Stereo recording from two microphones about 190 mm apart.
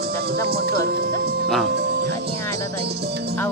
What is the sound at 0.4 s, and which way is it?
Speech, 55° right (ahead or behind).